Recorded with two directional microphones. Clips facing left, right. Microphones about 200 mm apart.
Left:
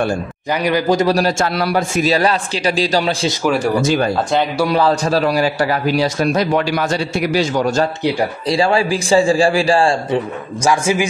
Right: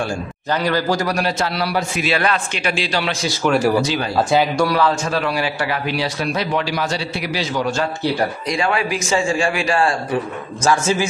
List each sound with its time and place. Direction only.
0.5 s a man's voice: 15° left (ahead or behind)
1.1 s a man's voice: 45° left (ahead or behind)
3.4 s speech: centre (ahead or behind)
3.8 s speech: 50° left (ahead or behind)
4.6 s a man's voice: 30° left (ahead or behind)
8.5 s a man's voice: 30° left (ahead or behind)
10.6 s a man's voice: 10° left (ahead or behind)